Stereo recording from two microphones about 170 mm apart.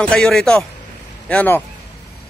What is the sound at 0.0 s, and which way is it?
A man's voice, centre (ahead or behind).